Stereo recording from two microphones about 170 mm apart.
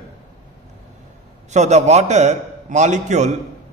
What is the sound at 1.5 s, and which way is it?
A man's voice, 45° right (ahead or behind).